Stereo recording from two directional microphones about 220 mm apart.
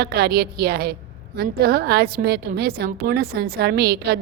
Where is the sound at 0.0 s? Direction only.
45° right (ahead or behind).